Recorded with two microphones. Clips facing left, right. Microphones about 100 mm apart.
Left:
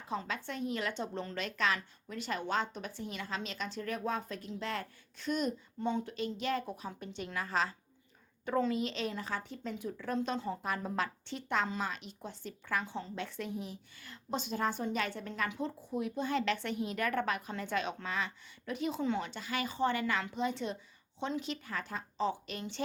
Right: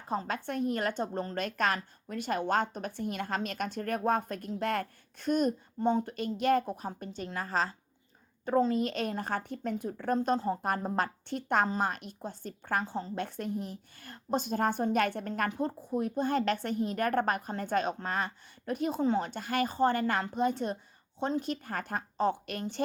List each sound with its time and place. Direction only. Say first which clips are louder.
0.1 s speech: right 5 dB; 45° right (ahead or behind)